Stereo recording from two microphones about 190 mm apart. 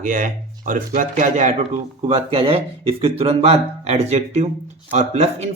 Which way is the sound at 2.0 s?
30° right (ahead or behind).